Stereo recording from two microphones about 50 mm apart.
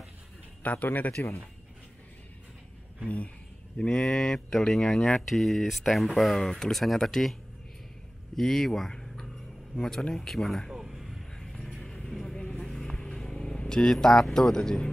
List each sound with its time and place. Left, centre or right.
0.6 s speech: left
3.7 s speech: centre
8.4 s speech: centre
10.7 s music: centre
12.4 s vehicle: centre